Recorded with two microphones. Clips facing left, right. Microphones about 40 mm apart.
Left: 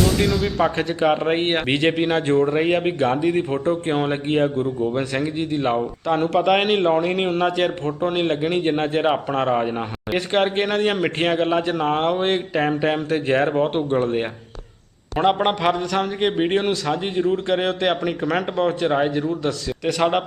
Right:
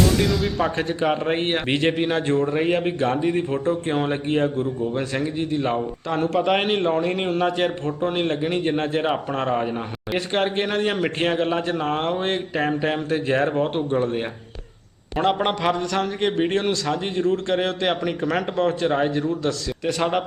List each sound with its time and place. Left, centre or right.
0.2 s a man's voice: centre
2.5 s speech: left
2.7 s a man's voice: centre
8.1 s a man's voice: centre
10.7 s a man's voice: centre